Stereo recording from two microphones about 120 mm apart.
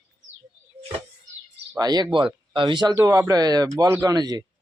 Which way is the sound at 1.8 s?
35° right (ahead or behind).